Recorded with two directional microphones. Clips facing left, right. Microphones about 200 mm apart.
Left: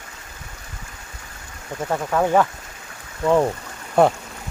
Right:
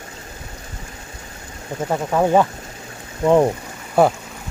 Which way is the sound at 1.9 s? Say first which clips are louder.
Right 2 dB; 15° right (ahead or behind).